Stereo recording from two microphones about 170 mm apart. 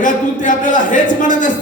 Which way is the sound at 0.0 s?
50° left (ahead or behind).